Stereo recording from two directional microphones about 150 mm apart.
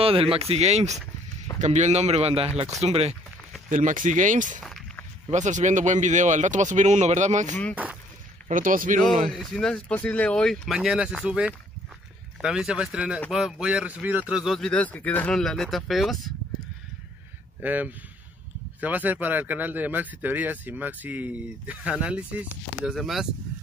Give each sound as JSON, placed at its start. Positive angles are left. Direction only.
{"t": 0.0, "sound": "speech", "side_deg": -40}
{"t": 3.7, "sound": "speech", "side_deg": -60}
{"t": 4.6, "sound": "walk", "side_deg": 0}
{"t": 5.3, "sound": "speech", "side_deg": -55}
{"t": 7.7, "sound": "speech", "side_deg": -10}
{"t": 8.5, "sound": "speech", "side_deg": -60}
{"t": 9.3, "sound": "speech", "side_deg": 0}
{"t": 17.6, "sound": "speech", "side_deg": -10}